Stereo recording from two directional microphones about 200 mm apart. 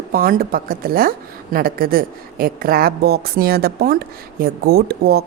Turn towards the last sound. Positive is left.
turn(degrees=-50)  # may be behind; listen again after turning